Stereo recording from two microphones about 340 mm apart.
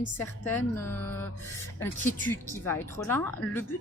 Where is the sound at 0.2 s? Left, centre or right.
Centre.